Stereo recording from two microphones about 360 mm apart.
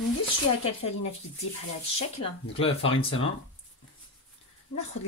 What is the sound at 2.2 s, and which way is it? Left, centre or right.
Speech, centre.